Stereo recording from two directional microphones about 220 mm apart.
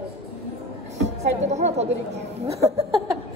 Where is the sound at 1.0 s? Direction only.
30° right (ahead or behind).